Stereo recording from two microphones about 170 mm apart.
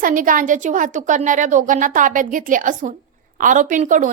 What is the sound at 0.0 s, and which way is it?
A woman's voice, 55° right (ahead or behind).